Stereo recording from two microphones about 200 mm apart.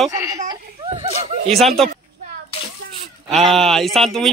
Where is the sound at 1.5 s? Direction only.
Centre (ahead or behind).